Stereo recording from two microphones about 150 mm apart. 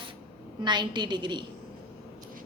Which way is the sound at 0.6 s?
30° right (ahead or behind).